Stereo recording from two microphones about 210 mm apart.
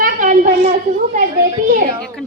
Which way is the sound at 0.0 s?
40° right (ahead or behind).